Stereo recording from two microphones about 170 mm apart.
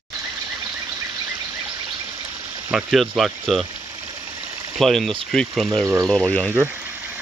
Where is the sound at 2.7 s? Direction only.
Centre (ahead or behind).